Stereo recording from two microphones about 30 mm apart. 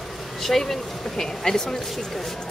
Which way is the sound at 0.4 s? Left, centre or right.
Centre.